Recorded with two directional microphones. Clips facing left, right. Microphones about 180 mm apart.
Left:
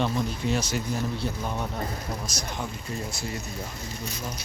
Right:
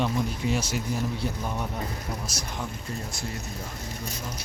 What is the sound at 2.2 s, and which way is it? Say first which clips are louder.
Speech: left 1 dB; 5° right (ahead or behind).